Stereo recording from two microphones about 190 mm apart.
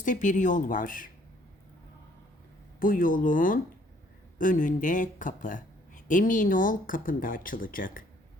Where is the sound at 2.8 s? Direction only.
45° left (ahead or behind).